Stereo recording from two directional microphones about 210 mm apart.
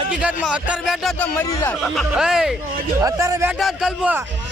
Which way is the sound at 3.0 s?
15° right (ahead or behind).